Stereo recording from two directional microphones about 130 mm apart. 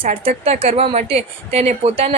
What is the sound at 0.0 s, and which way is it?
Speech, 50° right (ahead or behind).